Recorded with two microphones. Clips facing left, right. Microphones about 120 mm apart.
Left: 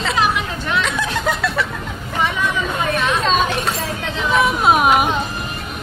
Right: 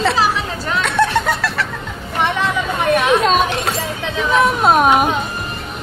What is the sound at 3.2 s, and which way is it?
Speech, 5° right (ahead or behind).